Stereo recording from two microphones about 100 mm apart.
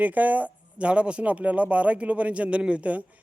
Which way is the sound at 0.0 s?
15° right (ahead or behind).